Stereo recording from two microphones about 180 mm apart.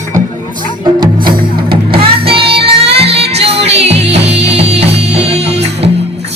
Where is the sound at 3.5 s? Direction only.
35° right (ahead or behind).